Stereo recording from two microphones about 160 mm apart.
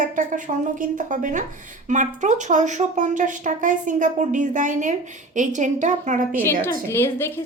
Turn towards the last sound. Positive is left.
turn(degrees=15)  # may be behind; listen again after turning